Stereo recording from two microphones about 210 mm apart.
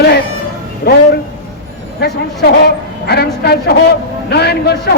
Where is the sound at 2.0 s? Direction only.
50° left (ahead or behind).